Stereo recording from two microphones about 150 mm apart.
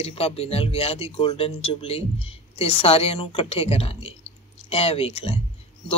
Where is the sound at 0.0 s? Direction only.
40° left (ahead or behind).